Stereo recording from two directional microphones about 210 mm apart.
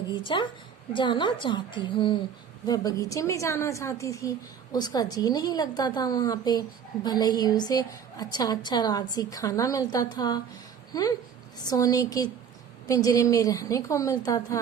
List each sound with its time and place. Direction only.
0.1 s a woman's voice: 25° left (ahead or behind)